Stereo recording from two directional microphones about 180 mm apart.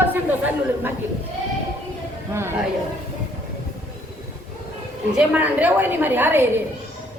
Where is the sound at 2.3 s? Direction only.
15° right (ahead or behind).